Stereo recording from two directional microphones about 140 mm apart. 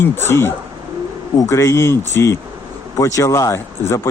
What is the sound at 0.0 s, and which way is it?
Speech, 15° left (ahead or behind).